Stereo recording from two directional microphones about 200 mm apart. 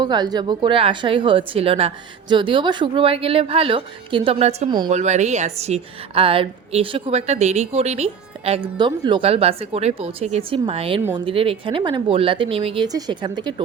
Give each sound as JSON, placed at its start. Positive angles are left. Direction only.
{"t": 0.0, "sound": "a woman's voice", "side_deg": -20}